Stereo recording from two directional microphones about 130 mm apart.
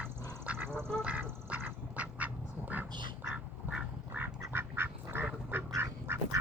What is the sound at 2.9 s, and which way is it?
Duck, 35° right (ahead or behind).